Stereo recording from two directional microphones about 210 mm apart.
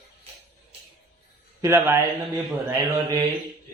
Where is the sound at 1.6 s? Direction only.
10° right (ahead or behind).